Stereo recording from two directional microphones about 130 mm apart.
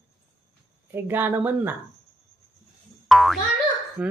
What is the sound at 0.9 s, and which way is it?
Speech, 15° right (ahead or behind).